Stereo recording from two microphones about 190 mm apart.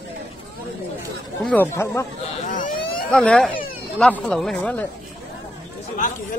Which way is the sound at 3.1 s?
5° left (ahead or behind).